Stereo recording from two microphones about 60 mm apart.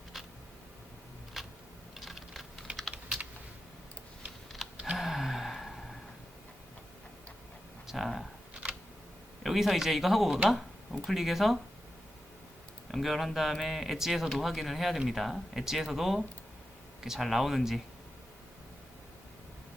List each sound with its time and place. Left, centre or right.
1.4 s a sound: centre
2.0 s computer keyboard: centre
2.7 s typing: right
4.6 s computer keyboard: centre
4.9 s a sound: centre
7.9 s speech: centre
9.4 s speech: centre
12.9 s speech: centre